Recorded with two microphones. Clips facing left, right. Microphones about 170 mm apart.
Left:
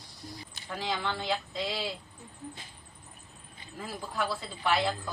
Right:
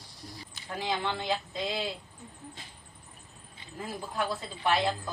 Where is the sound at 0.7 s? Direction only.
20° right (ahead or behind).